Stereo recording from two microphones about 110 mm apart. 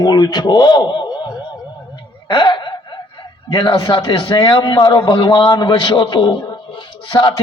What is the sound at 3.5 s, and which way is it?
A man's voice, 40° left (ahead or behind).